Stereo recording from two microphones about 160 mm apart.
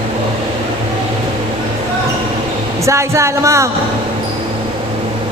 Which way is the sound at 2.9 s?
20° right (ahead or behind).